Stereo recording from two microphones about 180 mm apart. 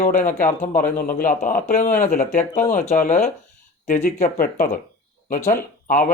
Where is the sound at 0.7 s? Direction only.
50° left (ahead or behind).